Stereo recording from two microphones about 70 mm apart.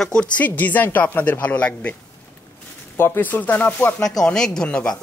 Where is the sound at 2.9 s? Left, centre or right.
Left.